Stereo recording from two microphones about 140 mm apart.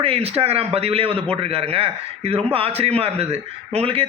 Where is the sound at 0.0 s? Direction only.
45° right (ahead or behind).